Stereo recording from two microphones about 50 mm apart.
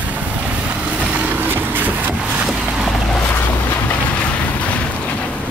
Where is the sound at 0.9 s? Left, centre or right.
Right.